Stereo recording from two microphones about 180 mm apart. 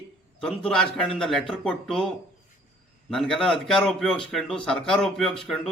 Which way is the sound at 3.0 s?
Centre (ahead or behind).